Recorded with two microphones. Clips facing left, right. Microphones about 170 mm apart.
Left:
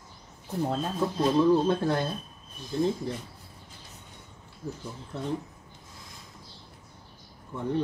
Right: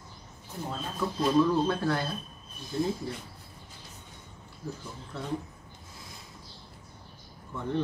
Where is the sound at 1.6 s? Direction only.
20° left (ahead or behind).